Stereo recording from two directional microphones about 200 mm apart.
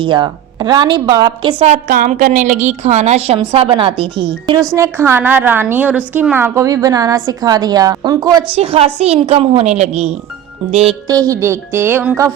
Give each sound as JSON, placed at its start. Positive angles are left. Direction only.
{"t": 0.0, "sound": "a woman's voice", "side_deg": -25}
{"t": 1.6, "sound": "a woman's voice", "side_deg": -40}
{"t": 4.7, "sound": "a woman's voice", "side_deg": -15}
{"t": 11.1, "sound": "a woman's voice", "side_deg": -15}